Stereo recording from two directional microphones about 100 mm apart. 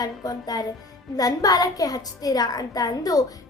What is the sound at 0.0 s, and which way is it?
A woman's voice, 40° left (ahead or behind).